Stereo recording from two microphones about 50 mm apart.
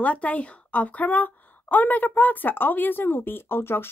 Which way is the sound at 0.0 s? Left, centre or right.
Left.